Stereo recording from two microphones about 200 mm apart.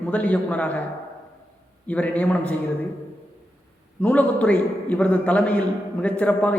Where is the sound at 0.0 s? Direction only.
5° left (ahead or behind).